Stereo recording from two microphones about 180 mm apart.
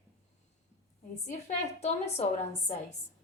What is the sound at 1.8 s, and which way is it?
Speech, 35° left (ahead or behind).